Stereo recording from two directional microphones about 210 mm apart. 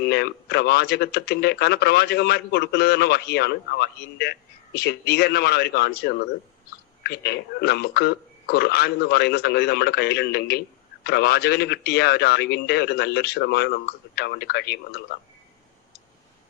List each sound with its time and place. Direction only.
0.0 s speech: 50° left (ahead or behind)